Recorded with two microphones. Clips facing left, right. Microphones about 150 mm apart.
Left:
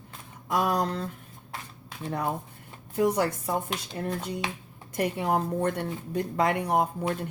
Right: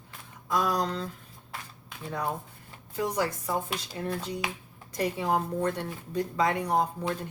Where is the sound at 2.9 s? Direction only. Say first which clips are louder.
Left 5 dB; 60° left (ahead or behind).